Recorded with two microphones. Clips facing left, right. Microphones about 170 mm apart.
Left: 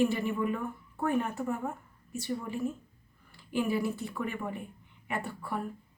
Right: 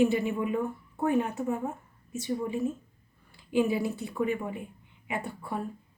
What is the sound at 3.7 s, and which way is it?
Speech, 15° right (ahead or behind).